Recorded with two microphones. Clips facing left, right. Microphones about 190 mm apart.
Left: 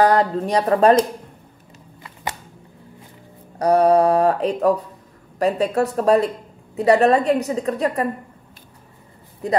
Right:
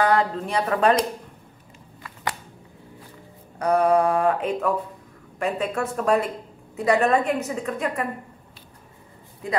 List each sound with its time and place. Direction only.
0.0 s a woman's voice: 40° left (ahead or behind)
3.5 s a woman's voice: 35° left (ahead or behind)
9.4 s a woman's voice: 40° left (ahead or behind)